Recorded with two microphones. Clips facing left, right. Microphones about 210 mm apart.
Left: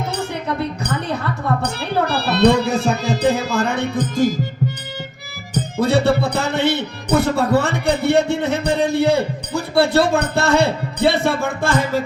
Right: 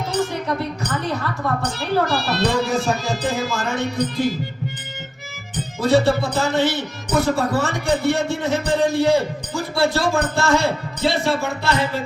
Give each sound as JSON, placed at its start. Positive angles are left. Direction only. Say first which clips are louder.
{"t": 0.9, "sound": "speech", "louder": "left 2 dB", "side_deg": 60}
{"t": 5.5, "sound": "speech", "louder": "even", "side_deg": 60}